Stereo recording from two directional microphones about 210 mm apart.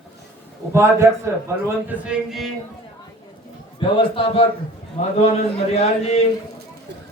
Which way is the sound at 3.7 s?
25° left (ahead or behind).